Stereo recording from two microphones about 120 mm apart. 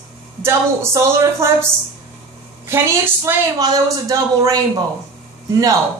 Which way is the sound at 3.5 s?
30° right (ahead or behind).